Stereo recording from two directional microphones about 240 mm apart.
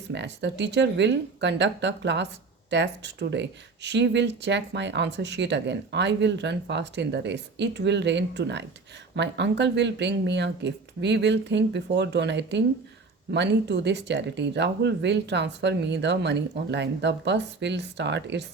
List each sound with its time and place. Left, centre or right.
0.1 s speech: right